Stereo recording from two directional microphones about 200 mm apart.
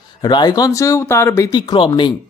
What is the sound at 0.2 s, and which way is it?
Speech, 20° left (ahead or behind).